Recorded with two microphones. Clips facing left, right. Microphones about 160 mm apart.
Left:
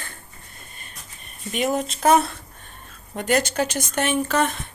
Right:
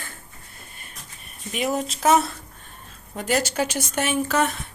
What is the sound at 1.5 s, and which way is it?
Speech, centre (ahead or behind).